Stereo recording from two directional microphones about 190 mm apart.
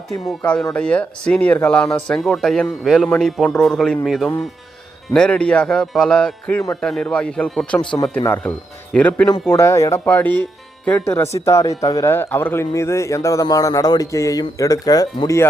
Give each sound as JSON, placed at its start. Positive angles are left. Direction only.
{"t": 0.3, "sound": "speech", "side_deg": 5}
{"t": 7.8, "sound": "speech", "side_deg": 25}
{"t": 8.2, "sound": "speech", "side_deg": 10}